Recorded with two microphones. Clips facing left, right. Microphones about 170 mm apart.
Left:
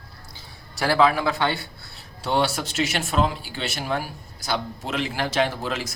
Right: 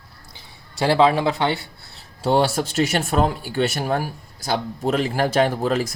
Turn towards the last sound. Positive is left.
turn(degrees=-45)  # may be behind; listen again after turning